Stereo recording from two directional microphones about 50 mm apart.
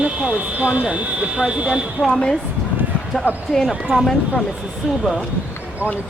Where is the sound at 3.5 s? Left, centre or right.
Centre.